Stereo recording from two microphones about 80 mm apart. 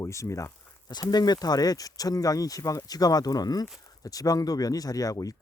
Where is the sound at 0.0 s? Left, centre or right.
Left.